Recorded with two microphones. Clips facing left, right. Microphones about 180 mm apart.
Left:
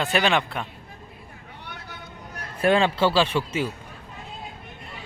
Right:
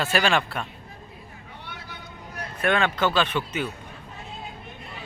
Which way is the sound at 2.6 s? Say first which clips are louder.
Left 3 dB; 30° left (ahead or behind).